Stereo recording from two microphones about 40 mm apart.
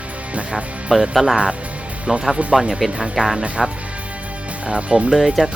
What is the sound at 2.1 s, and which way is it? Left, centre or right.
Speech, centre.